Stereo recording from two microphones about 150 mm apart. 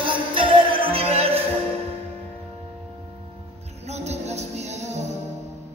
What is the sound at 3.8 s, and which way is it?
Music, 50° right (ahead or behind).